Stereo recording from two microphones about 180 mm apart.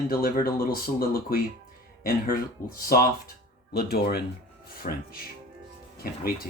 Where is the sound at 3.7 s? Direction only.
60° left (ahead or behind).